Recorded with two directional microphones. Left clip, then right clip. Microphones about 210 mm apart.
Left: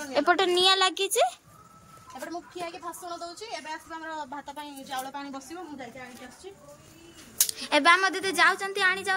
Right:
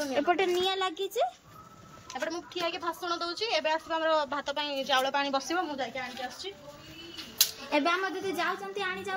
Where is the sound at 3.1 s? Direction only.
20° right (ahead or behind).